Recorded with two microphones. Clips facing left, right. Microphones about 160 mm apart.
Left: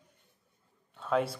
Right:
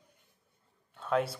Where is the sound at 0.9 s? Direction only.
Centre (ahead or behind).